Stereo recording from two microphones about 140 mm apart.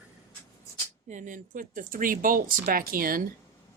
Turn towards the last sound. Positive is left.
turn(degrees=-90)